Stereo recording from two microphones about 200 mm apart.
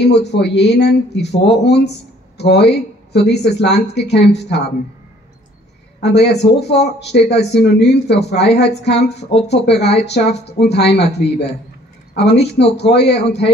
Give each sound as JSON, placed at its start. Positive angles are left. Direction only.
{"t": 0.0, "sound": "speech", "side_deg": 60}
{"t": 5.9, "sound": "speech", "side_deg": 55}